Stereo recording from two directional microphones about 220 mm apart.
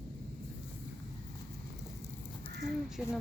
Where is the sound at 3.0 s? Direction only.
Centre (ahead or behind).